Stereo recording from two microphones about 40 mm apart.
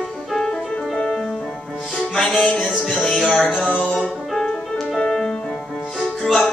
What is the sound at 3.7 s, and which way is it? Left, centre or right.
Music, left.